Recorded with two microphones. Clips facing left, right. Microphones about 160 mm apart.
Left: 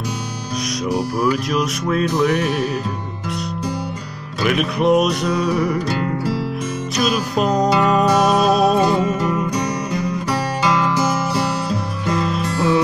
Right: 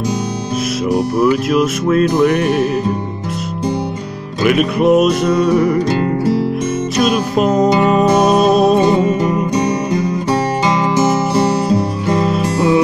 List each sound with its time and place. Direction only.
0.9 s music: centre (ahead or behind)
4.4 s music: centre (ahead or behind)
5.9 s music: 25° right (ahead or behind)
7.0 s music: centre (ahead or behind)
7.7 s music: 25° right (ahead or behind)
12.5 s music: centre (ahead or behind)